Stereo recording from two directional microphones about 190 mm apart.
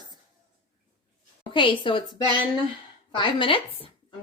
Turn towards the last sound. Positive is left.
turn(degrees=25)  # may be behind; listen again after turning